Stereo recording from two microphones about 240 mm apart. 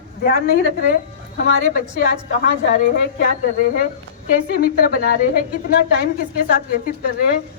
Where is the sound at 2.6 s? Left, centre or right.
Left.